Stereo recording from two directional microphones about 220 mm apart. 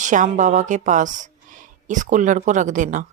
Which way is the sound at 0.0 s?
35° right (ahead or behind).